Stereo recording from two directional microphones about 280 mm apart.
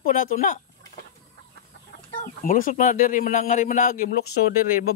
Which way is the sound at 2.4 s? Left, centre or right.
Left.